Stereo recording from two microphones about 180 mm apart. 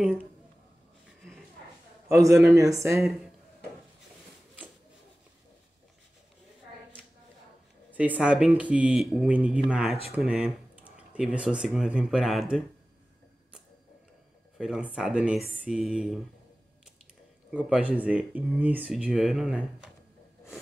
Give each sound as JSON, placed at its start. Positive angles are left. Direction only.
{"t": 2.4, "sound": "speech", "side_deg": -20}
{"t": 7.9, "sound": "speech", "side_deg": -10}
{"t": 14.6, "sound": "speech", "side_deg": -5}
{"t": 17.5, "sound": "speech", "side_deg": -5}